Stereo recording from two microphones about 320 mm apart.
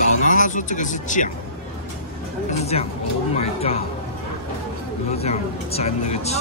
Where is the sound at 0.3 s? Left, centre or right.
Left.